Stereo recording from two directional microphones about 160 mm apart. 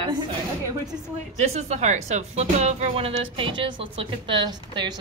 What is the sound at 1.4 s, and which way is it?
Speech, 45° right (ahead or behind).